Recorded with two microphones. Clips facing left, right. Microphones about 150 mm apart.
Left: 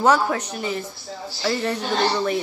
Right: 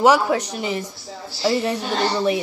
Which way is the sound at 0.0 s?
10° right (ahead or behind).